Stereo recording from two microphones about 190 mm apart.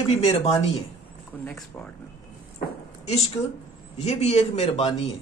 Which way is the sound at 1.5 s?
5° left (ahead or behind).